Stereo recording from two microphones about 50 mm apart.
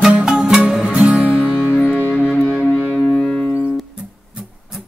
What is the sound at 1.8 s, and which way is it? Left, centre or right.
Music, left.